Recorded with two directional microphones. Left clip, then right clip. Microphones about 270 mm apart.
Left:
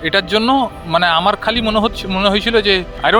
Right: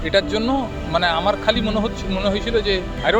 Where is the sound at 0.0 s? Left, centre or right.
Left.